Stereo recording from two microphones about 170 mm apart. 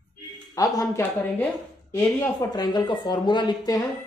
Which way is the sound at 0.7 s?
15° left (ahead or behind).